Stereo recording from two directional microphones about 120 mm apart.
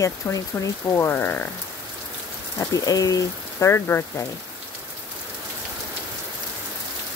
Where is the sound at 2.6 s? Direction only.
30° left (ahead or behind).